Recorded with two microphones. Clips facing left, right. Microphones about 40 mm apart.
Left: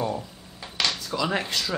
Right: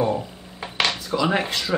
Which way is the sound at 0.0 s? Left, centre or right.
Right.